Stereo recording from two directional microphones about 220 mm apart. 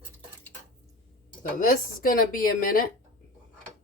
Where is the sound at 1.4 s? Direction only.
40° left (ahead or behind).